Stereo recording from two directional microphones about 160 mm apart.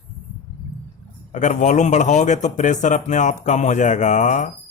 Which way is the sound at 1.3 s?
50° left (ahead or behind).